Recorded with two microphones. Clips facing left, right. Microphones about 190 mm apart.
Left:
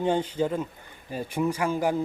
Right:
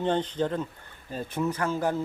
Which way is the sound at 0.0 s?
10° left (ahead or behind).